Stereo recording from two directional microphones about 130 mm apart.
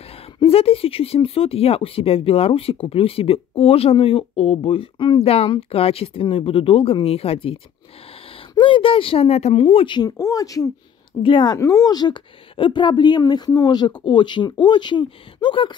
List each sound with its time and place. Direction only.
0.4 s speech: 50° left (ahead or behind)
8.5 s speech: 40° left (ahead or behind)
9.8 s speech: 30° left (ahead or behind)